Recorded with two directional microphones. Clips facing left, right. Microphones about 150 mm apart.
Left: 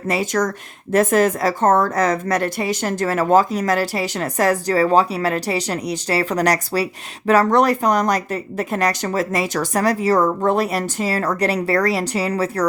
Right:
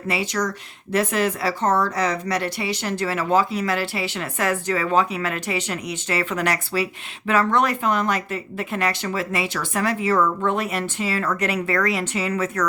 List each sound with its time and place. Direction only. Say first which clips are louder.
0.1 s speech: left 4 dB; 45° left (ahead or behind)